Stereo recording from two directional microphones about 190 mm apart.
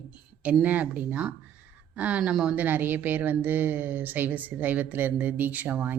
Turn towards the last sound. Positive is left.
turn(degrees=-10)  # may be behind; listen again after turning